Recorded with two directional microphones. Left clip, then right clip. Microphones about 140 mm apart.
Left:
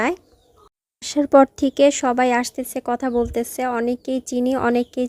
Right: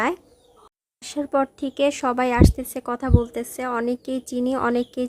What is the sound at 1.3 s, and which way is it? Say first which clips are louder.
A woman's voice: left 9 dB; 50° left (ahead or behind).